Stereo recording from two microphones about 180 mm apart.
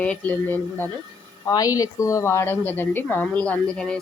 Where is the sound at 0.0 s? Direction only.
10° left (ahead or behind).